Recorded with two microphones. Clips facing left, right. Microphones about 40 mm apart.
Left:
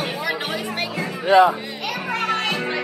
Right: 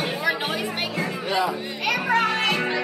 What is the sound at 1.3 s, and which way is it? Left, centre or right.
Speech, left.